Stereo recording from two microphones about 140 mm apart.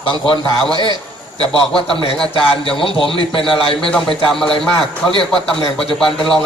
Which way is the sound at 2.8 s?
40° left (ahead or behind).